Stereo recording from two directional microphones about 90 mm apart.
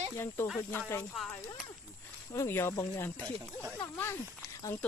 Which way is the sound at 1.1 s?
Centre (ahead or behind).